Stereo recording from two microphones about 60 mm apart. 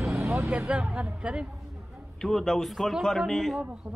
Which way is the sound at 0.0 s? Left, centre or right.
Centre.